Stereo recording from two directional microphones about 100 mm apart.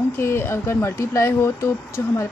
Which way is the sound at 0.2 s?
25° left (ahead or behind).